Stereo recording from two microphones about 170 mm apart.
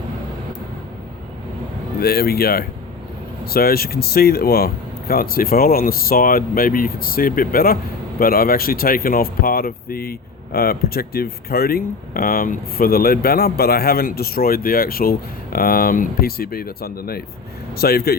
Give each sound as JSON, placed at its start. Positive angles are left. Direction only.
{"t": 2.0, "sound": "speech", "side_deg": 65}